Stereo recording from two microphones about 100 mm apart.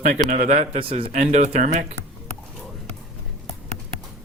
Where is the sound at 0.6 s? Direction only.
85° right.